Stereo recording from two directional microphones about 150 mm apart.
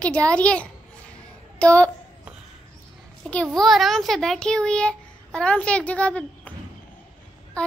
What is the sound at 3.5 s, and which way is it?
A child's voice, centre (ahead or behind).